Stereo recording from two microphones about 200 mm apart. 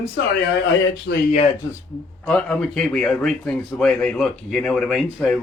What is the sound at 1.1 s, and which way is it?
Speech, 60° left (ahead or behind).